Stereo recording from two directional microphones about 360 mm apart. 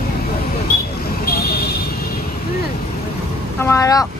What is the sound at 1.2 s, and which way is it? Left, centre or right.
Vehicle, left.